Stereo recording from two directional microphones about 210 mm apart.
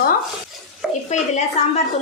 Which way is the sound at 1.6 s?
30° left (ahead or behind).